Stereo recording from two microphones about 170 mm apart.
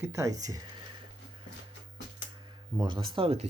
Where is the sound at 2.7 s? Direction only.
25° right (ahead or behind).